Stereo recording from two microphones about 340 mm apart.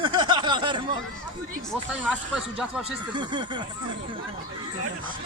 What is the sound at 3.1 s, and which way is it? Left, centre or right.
Speech, centre.